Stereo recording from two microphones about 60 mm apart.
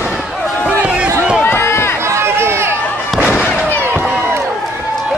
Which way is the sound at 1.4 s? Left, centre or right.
Left.